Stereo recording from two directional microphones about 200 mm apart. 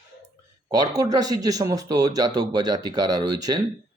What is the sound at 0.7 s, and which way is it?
Speech, 20° right (ahead or behind).